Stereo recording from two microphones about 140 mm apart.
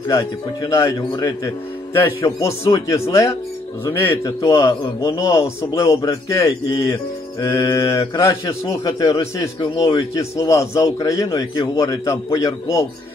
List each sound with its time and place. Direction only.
0.1 s a man's voice: 20° left (ahead or behind)
7.7 s a man's voice: 20° left (ahead or behind)
9.6 s a man's voice: 35° left (ahead or behind)